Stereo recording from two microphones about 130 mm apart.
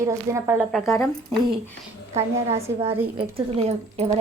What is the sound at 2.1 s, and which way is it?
Speech, 55° right (ahead or behind).